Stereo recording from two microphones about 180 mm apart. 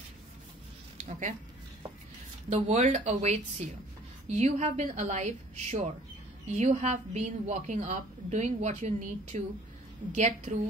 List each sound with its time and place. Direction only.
2.5 s a woman's voice: 40° right (ahead or behind)